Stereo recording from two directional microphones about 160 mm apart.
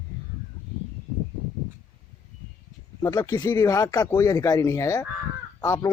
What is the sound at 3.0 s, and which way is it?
Speech, 20° left (ahead or behind).